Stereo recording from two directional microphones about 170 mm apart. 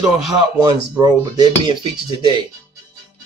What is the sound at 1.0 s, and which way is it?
Speech, 25° right (ahead or behind).